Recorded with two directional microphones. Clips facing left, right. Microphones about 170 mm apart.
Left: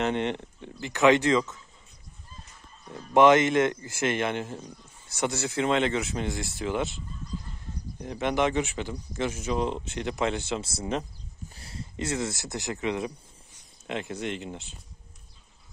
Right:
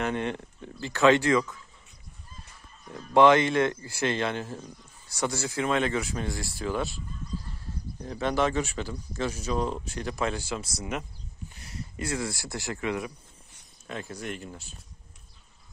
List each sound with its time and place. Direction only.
0.0 s speech: 20° left (ahead or behind)
2.9 s speech: 20° left (ahead or behind)
8.0 s speech: 20° left (ahead or behind)